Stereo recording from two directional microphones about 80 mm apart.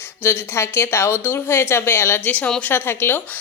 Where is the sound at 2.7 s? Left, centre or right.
Left.